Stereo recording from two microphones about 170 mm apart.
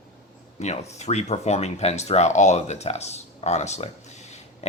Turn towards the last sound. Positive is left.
turn(degrees=40)  # may be behind; listen again after turning